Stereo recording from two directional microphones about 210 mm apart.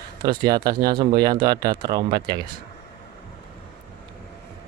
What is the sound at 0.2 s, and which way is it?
Speech, 20° right (ahead or behind).